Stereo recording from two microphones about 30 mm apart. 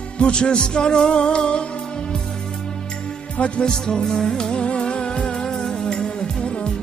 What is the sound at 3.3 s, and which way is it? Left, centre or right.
Music, left.